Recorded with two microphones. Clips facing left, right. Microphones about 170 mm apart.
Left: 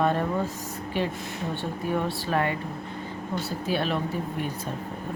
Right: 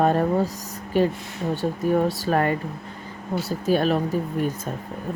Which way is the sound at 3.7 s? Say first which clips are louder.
Right 7 dB; 40° right (ahead or behind).